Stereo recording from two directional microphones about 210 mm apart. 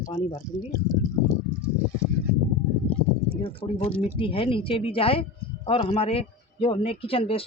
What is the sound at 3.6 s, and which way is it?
A woman's voice, 25° left (ahead or behind).